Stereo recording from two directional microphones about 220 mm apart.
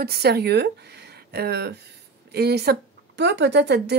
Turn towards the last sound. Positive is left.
turn(degrees=-50)  # may be behind; listen again after turning